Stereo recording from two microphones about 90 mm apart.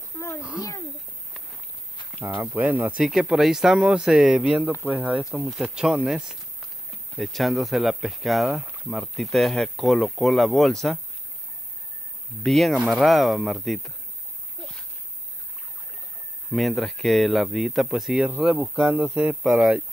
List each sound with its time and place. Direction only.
0.4 s speech: 10° right (ahead or behind)
2.3 s speech: 15° right (ahead or behind)
3.0 s speech: 5° right (ahead or behind)
5.5 s speech: 5° right (ahead or behind)
12.4 s speech: centre (ahead or behind)
16.5 s speech: centre (ahead or behind)
18.9 s speech: 20° right (ahead or behind)
19.4 s speech: 5° right (ahead or behind)